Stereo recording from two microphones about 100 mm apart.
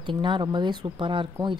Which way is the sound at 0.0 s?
55° right (ahead or behind).